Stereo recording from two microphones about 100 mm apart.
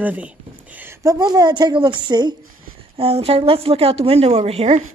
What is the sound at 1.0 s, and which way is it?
A woman's voice, 40° right (ahead or behind).